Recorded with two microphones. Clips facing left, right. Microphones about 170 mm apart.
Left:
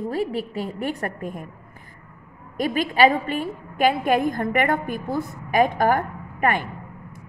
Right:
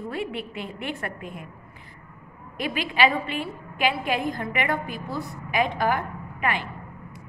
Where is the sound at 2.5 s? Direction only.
45° left (ahead or behind).